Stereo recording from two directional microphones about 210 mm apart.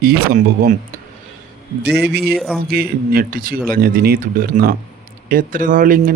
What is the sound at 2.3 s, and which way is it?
Speech, centre (ahead or behind).